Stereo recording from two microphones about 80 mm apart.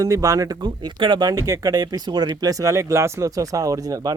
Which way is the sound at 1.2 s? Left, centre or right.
Right.